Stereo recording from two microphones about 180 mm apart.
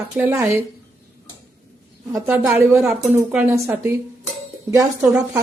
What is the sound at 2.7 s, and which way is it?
Speech, centre (ahead or behind).